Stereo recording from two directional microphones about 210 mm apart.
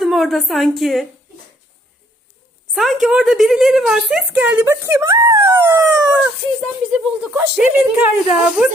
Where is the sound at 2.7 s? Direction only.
Centre (ahead or behind).